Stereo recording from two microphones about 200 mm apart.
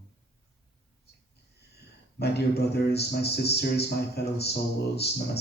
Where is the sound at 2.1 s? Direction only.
55° left (ahead or behind).